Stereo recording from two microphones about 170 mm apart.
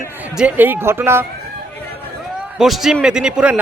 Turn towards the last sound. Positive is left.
turn(degrees=-5)  # may be behind; listen again after turning